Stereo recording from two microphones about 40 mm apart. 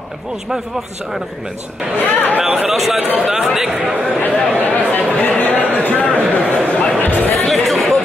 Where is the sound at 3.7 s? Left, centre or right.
Right.